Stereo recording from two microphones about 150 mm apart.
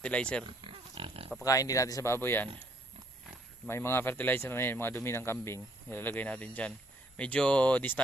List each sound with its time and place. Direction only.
0.0 s speech: 5° left (ahead or behind)
0.4 s pig: 35° right (ahead or behind)
1.5 s speech: 20° left (ahead or behind)
3.7 s speech: 15° left (ahead or behind)